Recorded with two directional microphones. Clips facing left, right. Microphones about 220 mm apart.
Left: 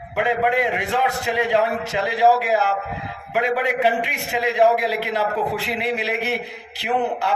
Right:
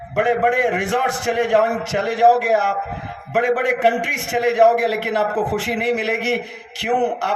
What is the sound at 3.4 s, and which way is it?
A man's voice, 50° right (ahead or behind).